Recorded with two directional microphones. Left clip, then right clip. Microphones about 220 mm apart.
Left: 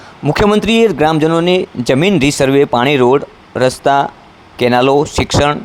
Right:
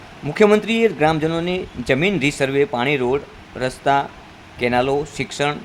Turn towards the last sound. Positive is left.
turn(degrees=30)  # may be behind; listen again after turning